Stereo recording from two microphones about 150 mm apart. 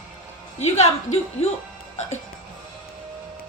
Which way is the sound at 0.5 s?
45° left (ahead or behind).